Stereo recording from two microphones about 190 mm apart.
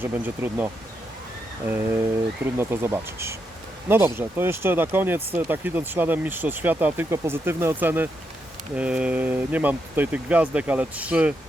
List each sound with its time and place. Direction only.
0.0 s speech: 10° right (ahead or behind)